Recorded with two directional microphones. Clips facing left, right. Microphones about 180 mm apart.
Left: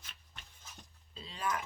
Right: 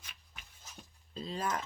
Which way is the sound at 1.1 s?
40° right (ahead or behind).